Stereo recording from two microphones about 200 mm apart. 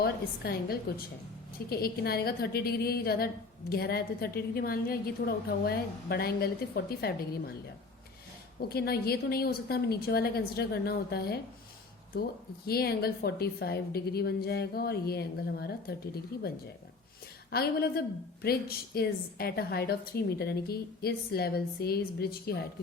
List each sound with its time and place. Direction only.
0.0 s a woman's voice: 50° left (ahead or behind)
8.7 s a woman's voice: 50° left (ahead or behind)
12.6 s a woman's voice: 50° left (ahead or behind)
17.5 s a woman's voice: 50° left (ahead or behind)